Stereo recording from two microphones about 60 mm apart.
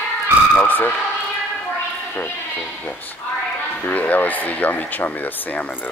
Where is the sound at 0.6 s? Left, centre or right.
Left.